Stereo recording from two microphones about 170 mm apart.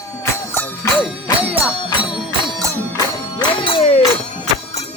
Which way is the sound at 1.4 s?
10° right (ahead or behind).